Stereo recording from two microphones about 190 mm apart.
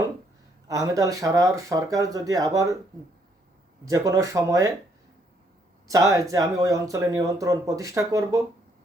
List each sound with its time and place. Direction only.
0.7 s speech: 20° right (ahead or behind)
3.8 s speech: 15° right (ahead or behind)
5.9 s speech: 15° right (ahead or behind)